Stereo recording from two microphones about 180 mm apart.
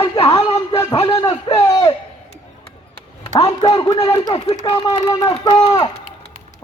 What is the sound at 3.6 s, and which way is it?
A man's voice, 20° left (ahead or behind).